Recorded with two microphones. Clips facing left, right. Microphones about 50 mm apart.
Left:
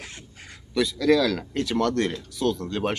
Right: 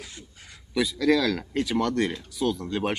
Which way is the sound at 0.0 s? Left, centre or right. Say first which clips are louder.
Left 2 dB; left.